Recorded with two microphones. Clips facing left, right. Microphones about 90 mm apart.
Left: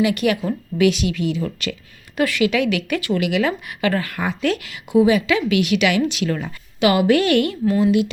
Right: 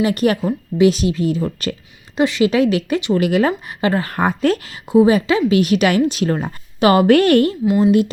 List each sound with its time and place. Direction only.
0.0 s speech: 40° right (ahead or behind)
2.1 s speech: 25° right (ahead or behind); by 8.1 s 40° right (ahead or behind)